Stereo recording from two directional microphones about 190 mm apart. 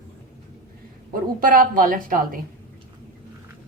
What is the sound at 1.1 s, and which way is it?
Speech, 45° right (ahead or behind).